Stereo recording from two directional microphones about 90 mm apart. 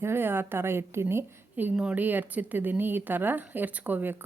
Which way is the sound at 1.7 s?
10° right (ahead or behind).